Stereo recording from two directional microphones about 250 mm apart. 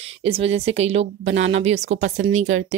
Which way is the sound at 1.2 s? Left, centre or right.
Right.